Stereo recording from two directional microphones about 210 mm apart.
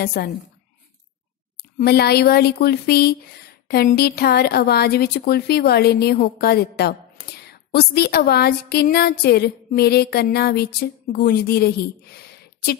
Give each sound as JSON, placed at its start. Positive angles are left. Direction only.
{"t": 0.0, "sound": "speech", "side_deg": 50}
{"t": 1.6, "sound": "speech", "side_deg": 50}